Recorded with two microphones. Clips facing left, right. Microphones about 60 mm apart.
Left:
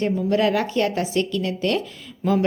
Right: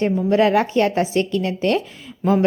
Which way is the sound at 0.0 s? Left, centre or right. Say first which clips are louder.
Right 3 dB; right.